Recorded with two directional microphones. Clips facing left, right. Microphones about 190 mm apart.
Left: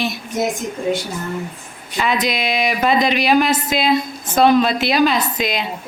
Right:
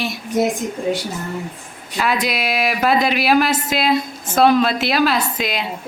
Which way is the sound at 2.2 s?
5° right (ahead or behind).